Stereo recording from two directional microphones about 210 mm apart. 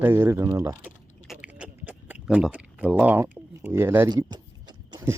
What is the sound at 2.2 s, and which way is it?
Speech, 5° right (ahead or behind).